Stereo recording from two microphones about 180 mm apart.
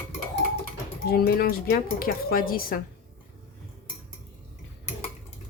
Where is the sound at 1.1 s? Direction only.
60° left (ahead or behind).